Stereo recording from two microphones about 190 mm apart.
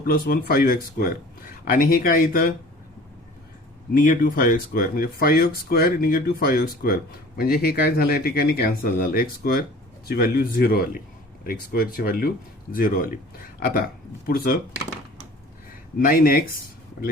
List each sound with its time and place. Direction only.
0.0 s speech: 50° left (ahead or behind)
3.9 s speech: 45° left (ahead or behind)
16.0 s speech: 50° left (ahead or behind)